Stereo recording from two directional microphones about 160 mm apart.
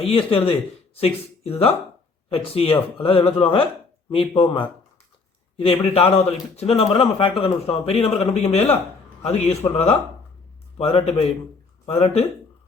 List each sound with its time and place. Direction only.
0.0 s speech: 35° left (ahead or behind)
5.5 s speech: 35° left (ahead or behind)